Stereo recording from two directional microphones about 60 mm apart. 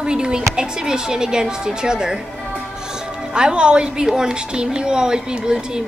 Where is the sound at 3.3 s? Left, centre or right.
Centre.